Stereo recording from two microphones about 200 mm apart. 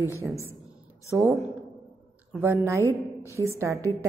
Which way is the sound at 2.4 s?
15° right (ahead or behind).